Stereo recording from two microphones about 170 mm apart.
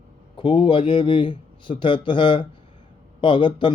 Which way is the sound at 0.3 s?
30° left (ahead or behind).